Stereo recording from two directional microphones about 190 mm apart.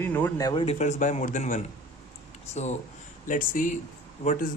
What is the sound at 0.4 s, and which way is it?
A man's voice, 30° left (ahead or behind).